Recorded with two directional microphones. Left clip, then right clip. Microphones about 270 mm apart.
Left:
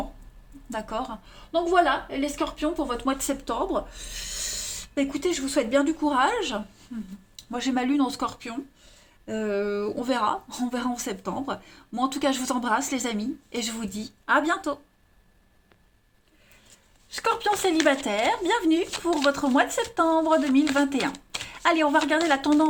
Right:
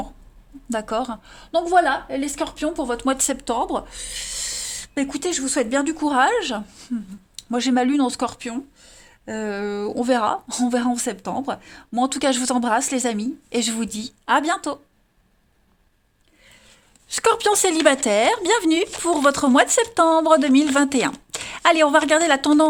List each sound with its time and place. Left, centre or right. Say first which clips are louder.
0.7 s a woman's voice: right 6 dB; right
17.2 s speech: right 6 dB; right